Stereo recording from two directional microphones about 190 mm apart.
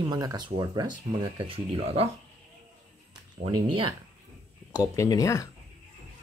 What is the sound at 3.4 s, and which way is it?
Speech, 25° right (ahead or behind).